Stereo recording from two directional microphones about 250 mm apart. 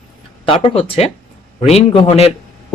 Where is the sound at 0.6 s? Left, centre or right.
Left.